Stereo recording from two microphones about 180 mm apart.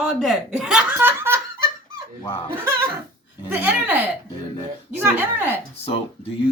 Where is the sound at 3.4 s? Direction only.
10° right (ahead or behind).